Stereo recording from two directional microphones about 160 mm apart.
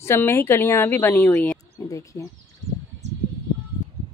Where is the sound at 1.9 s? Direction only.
20° left (ahead or behind).